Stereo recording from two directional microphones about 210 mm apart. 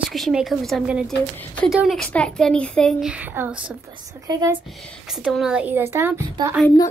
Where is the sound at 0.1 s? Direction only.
Centre (ahead or behind).